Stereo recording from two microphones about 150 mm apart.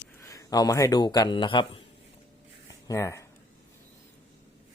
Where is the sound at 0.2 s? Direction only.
25° left (ahead or behind).